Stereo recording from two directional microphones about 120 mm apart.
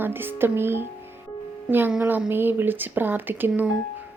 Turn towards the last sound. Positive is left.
turn(degrees=-15)  # may be behind; listen again after turning